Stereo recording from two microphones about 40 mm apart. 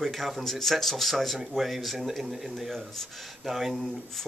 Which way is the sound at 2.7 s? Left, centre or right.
Centre.